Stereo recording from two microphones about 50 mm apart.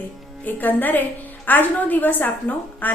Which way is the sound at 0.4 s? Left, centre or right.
Left.